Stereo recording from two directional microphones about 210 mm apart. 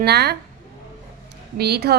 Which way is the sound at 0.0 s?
50° right (ahead or behind).